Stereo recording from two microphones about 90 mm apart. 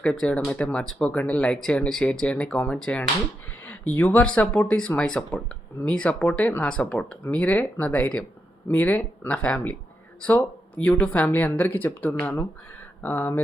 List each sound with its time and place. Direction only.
0.0 s speech: 10° left (ahead or behind)
3.7 s speech: 20° left (ahead or behind)